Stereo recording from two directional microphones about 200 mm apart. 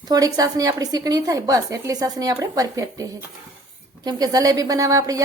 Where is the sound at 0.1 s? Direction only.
20° right (ahead or behind).